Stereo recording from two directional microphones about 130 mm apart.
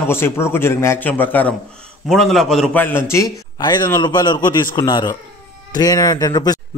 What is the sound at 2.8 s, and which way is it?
Speech, 15° left (ahead or behind).